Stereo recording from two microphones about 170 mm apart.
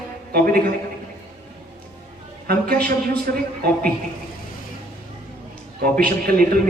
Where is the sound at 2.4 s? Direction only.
60° right (ahead or behind).